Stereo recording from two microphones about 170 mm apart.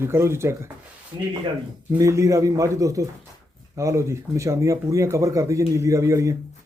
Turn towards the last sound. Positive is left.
turn(degrees=-15)  # may be behind; listen again after turning